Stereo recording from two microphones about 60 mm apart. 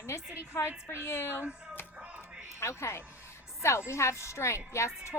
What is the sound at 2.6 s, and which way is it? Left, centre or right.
A woman's voice, left.